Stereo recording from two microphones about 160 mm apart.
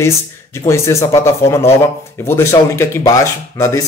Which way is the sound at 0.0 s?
15° left (ahead or behind).